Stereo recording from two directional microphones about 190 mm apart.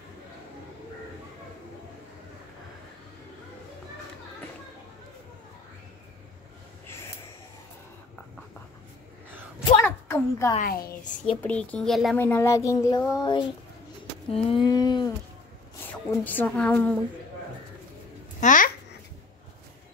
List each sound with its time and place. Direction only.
9.8 s a sound: 10° left (ahead or behind)
10.6 s a woman's voice: 50° left (ahead or behind)
11.1 s speech: 40° left (ahead or behind)
11.4 s speech: 5° left (ahead or behind)
12.2 s a sound: 10° left (ahead or behind)
15.8 s a woman's voice: 10° left (ahead or behind)
18.4 s babbling: 40° left (ahead or behind)